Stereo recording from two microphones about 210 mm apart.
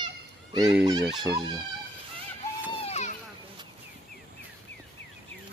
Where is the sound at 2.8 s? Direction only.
30° left (ahead or behind).